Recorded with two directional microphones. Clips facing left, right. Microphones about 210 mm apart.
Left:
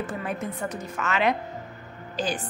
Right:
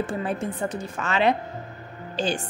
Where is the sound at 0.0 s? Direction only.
30° right (ahead or behind).